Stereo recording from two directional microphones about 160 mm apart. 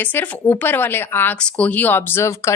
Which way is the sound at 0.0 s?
10° left (ahead or behind).